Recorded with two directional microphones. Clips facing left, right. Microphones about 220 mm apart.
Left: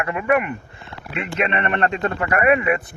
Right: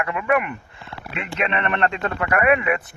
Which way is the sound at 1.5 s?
35° left (ahead or behind).